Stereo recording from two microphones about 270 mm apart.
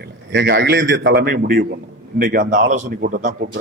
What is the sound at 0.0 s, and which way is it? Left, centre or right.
A man's voice, right.